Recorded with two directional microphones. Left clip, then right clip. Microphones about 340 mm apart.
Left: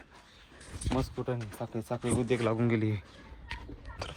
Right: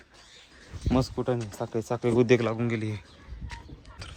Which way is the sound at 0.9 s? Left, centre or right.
Right.